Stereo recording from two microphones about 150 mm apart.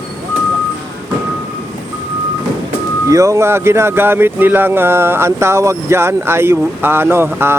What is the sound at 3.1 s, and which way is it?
Speech, 20° right (ahead or behind).